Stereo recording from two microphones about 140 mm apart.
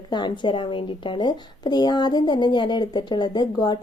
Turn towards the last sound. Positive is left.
turn(degrees=30)  # may be behind; listen again after turning